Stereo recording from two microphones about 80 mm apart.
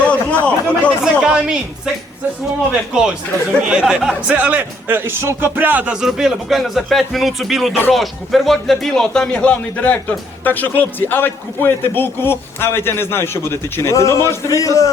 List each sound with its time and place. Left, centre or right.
0.0 s speech: centre
1.0 s a woman's voice: centre
2.9 s a woman's voice: centre; by 5.5 s right
5.5 s a man's voice: right; by 14.8 s left